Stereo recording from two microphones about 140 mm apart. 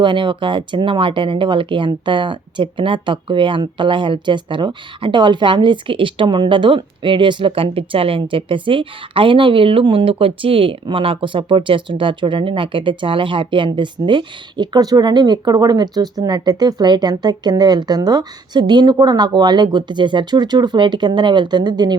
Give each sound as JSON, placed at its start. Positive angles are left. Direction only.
{"t": 0.0, "sound": "speech", "side_deg": -35}